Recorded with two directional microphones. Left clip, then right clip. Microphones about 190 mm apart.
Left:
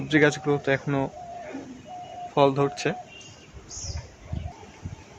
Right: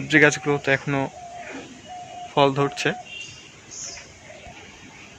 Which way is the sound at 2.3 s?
20° right (ahead or behind).